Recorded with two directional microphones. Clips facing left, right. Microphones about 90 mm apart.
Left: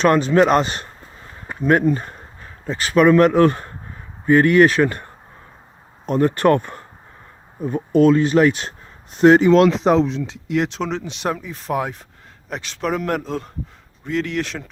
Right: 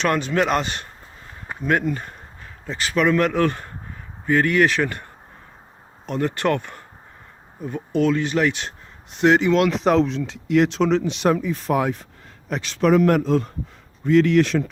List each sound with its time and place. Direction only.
0.0 s speech: 35° left (ahead or behind)
6.1 s speech: 40° left (ahead or behind)
9.8 s speech: 20° left (ahead or behind)
10.8 s a man's voice: 10° left (ahead or behind)
11.0 s a man's voice: 20° left (ahead or behind)